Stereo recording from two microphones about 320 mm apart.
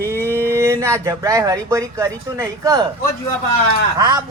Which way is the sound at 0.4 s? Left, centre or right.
Centre.